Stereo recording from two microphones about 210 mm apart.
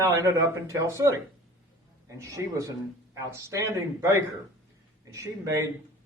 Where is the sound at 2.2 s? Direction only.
15° right (ahead or behind).